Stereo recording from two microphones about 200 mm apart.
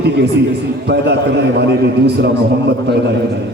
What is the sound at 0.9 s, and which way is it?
A man's voice, 55° right (ahead or behind).